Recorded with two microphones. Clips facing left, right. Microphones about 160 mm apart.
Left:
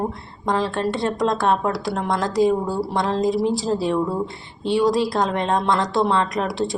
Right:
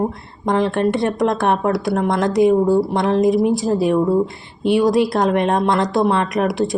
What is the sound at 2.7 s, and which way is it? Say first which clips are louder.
Speech: right 6 dB; 20° right (ahead or behind).